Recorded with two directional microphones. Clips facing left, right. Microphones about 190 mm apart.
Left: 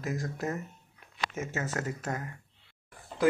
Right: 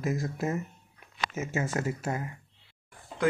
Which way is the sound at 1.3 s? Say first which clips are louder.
Right 4 dB; 15° right (ahead or behind).